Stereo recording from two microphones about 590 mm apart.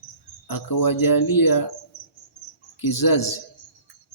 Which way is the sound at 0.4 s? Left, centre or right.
Left.